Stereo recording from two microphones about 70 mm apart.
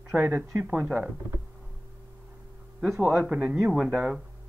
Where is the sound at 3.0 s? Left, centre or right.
Centre.